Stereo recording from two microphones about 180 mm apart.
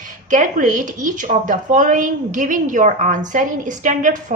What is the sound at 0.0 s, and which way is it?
A woman's voice, 45° right (ahead or behind).